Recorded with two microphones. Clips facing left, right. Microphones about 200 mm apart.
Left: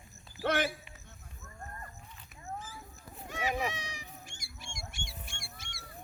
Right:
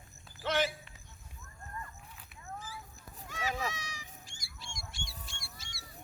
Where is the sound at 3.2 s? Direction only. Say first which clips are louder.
Left 3 dB; 20° left (ahead or behind).